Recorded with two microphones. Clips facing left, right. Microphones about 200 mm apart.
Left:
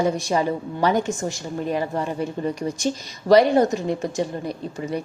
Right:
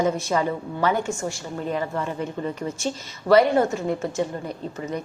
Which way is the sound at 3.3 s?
15° left (ahead or behind).